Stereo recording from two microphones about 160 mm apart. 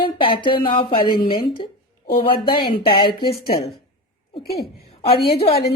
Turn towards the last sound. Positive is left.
turn(degrees=35)  # may be behind; listen again after turning